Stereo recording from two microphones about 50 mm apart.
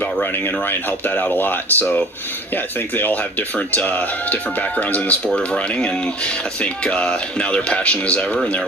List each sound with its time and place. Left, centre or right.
0.0 s speech: left